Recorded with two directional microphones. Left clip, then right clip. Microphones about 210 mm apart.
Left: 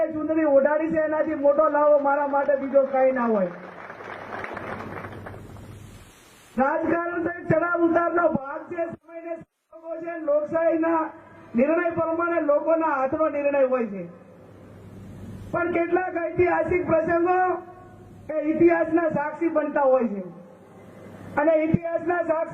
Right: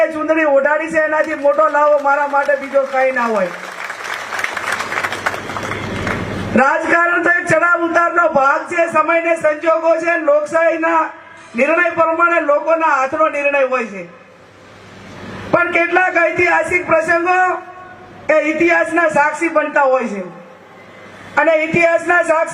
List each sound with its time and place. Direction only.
0.0 s a man's voice: 10° right (ahead or behind)
2.5 s a man's voice: 10° right (ahead or behind)
4.3 s applause: 15° right (ahead or behind)
6.6 s a man's voice: 15° right (ahead or behind)
15.5 s a man's voice: 10° right (ahead or behind)
21.3 s a man's voice: 10° right (ahead or behind)